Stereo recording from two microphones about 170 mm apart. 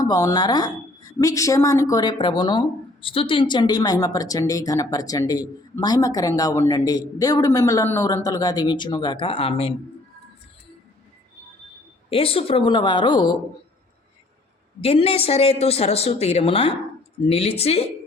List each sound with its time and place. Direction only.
0.0 s a woman's voice: 20° left (ahead or behind)
12.0 s a woman's voice: 35° left (ahead or behind)
14.8 s speech: 35° left (ahead or behind)